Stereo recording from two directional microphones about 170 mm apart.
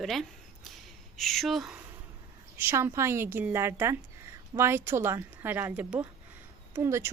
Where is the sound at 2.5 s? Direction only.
15° right (ahead or behind).